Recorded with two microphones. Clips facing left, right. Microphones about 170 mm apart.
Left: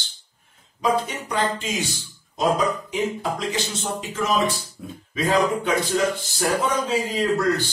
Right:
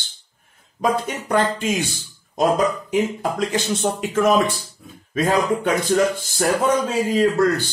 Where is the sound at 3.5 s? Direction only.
55° right (ahead or behind).